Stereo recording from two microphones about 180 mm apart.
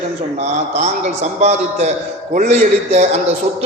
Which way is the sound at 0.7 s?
40° right (ahead or behind).